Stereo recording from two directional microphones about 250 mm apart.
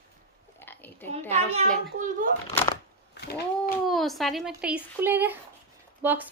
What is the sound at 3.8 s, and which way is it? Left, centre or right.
Speech, centre.